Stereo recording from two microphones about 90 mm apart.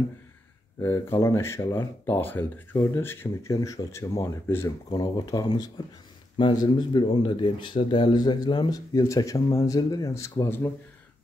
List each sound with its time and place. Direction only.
0.8 s speech: 30° left (ahead or behind)
3.6 s speech: 40° left (ahead or behind)
4.8 s speech: 45° left (ahead or behind)
6.3 s speech: 70° left (ahead or behind)
8.7 s speech: 40° left (ahead or behind)